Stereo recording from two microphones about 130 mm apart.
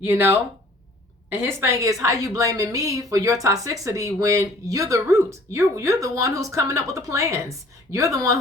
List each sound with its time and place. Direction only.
0.0 s a woman's voice: 15° right (ahead or behind)